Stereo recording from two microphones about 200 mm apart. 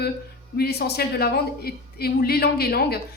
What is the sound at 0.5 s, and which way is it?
A woman's voice, 55° left (ahead or behind).